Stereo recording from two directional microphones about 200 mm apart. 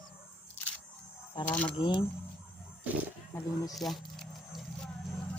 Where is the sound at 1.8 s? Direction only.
25° left (ahead or behind).